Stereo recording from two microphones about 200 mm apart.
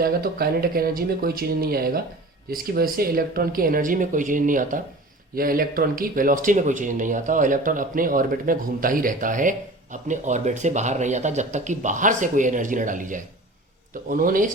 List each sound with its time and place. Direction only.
0.0 s speech: 50° right (ahead or behind)